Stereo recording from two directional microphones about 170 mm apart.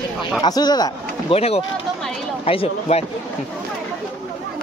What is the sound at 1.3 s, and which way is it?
Speech, 35° left (ahead or behind).